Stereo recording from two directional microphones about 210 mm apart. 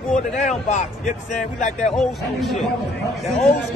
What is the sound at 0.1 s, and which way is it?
A man's voice, 35° left (ahead or behind).